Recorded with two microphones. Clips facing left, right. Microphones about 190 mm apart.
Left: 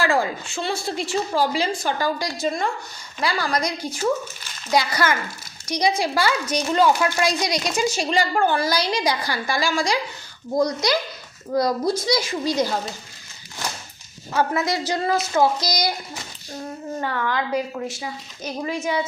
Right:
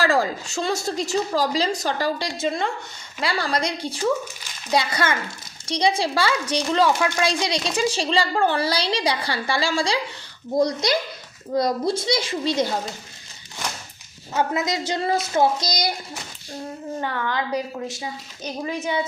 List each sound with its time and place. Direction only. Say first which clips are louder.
0.0 s a woman's voice: right 1 dB; 35° right (ahead or behind)
14.7 s a woman's voice: left 1 dB; 25° right (ahead or behind)
17.0 s a woman's voice: left 1 dB; 20° right (ahead or behind)